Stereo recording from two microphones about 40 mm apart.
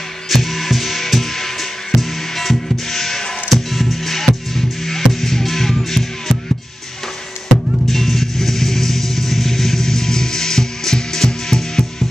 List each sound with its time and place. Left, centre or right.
0.3 s music: centre
7.4 s music: centre